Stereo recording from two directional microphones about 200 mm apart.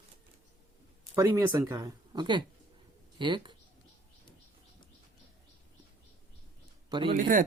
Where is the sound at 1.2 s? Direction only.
15° right (ahead or behind).